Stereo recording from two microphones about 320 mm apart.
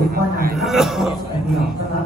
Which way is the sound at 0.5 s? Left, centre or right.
Centre.